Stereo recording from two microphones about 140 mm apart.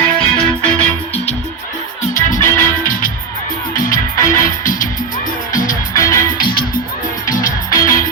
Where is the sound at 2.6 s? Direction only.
80° left.